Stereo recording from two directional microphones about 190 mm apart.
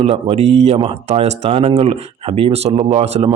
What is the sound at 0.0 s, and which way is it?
A man's voice, 30° right (ahead or behind).